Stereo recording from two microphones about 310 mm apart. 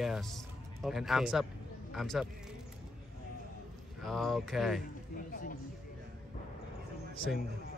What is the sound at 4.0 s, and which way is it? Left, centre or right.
Speech, centre.